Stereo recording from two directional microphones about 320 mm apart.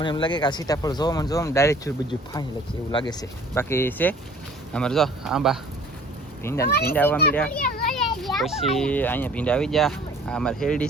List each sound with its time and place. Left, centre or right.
0.0 s speech: centre
2.9 s speech: centre
6.7 s a child's voice: left
6.9 s a child's voice: centre